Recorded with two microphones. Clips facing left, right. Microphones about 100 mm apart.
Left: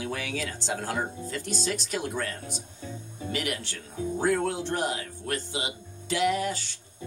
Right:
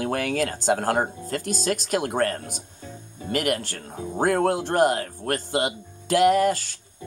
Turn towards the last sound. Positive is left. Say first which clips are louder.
# right 8 dB
turn(degrees=-50)  # may be behind; listen again after turning